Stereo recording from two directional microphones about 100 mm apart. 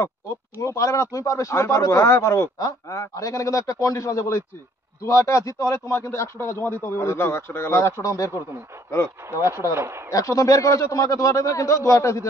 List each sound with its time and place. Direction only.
0.6 s speech: 30° left (ahead or behind)
9.8 s speech: 25° right (ahead or behind)
10.0 s speech: 35° left (ahead or behind)